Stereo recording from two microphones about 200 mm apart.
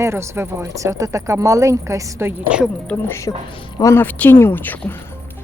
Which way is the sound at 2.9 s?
15° left (ahead or behind).